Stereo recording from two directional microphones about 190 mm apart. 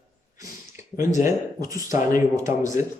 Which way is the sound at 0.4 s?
15° right (ahead or behind).